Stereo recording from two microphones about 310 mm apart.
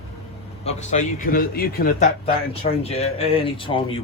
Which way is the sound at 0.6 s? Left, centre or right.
Left.